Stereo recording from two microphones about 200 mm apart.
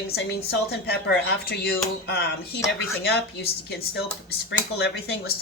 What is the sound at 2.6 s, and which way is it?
A woman's voice, 60° left (ahead or behind).